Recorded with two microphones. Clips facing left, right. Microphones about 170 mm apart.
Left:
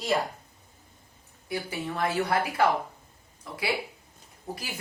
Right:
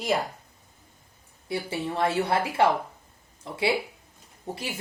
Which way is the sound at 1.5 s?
25° right (ahead or behind).